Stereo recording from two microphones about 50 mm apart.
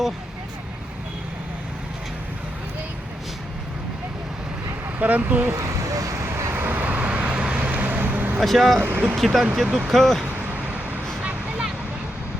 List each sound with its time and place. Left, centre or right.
4.9 s speech: right
5.5 s vehicle: right
6.5 s vehicle: right
8.4 s speech: centre
8.8 s speech: right
9.0 s speech: centre
9.6 s speech: centre
9.9 s speech: centre
10.5 s vehicle: right